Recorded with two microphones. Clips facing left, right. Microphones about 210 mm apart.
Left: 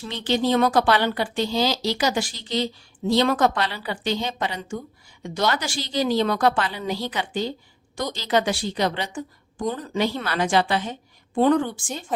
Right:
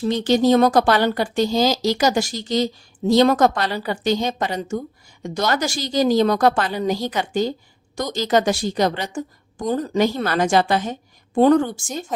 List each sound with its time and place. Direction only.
0.0 s a woman's voice: 40° right (ahead or behind)